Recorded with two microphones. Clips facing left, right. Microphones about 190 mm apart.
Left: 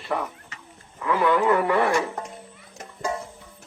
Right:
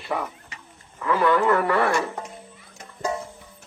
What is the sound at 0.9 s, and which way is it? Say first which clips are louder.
Speech: right 1 dB; 10° left (ahead or behind).